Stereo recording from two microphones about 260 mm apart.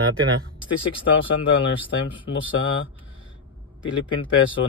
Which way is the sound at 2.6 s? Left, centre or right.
Left.